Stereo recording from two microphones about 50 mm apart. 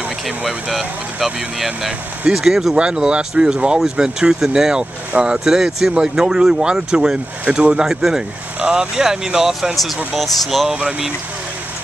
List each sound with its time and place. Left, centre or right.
0.5 s speech: centre; by 7.6 s right
7.8 s speech: centre
10.7 s speech: right